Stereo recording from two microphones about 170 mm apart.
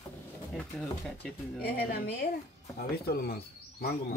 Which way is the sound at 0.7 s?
5° left (ahead or behind).